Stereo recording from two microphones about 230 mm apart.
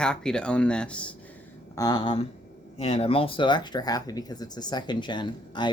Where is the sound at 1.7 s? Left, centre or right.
Centre.